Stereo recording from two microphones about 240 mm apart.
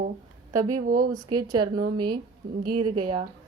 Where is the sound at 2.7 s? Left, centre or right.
Right.